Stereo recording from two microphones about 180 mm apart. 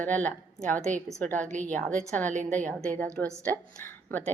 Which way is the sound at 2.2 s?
45° right (ahead or behind).